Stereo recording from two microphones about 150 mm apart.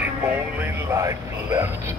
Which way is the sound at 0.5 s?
15° right (ahead or behind).